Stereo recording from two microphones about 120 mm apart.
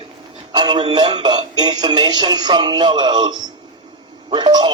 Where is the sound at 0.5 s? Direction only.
40° right (ahead or behind).